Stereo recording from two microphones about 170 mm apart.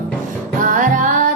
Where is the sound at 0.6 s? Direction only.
50° right (ahead or behind).